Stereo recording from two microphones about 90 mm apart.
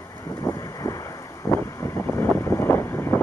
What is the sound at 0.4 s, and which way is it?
Wind noise, 40° left (ahead or behind).